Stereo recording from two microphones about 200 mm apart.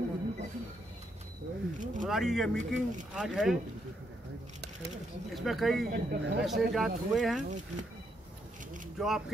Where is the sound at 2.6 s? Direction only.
40° right (ahead or behind).